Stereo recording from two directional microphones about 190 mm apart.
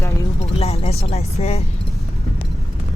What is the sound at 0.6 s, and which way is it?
Speech, 35° left (ahead or behind).